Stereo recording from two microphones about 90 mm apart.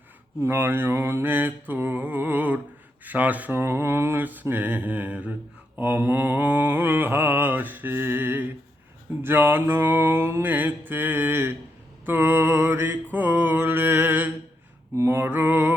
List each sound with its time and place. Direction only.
0.4 s mantra: 25° right (ahead or behind)